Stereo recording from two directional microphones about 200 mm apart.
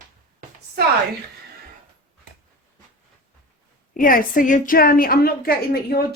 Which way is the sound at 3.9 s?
45° left (ahead or behind).